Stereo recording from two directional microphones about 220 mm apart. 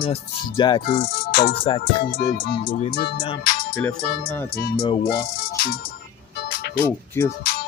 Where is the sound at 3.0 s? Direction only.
45° left (ahead or behind).